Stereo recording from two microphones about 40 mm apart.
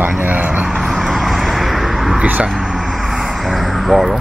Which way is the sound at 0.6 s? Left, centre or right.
Centre.